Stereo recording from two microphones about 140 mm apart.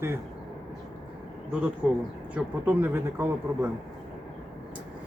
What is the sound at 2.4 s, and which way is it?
Speech, 15° right (ahead or behind).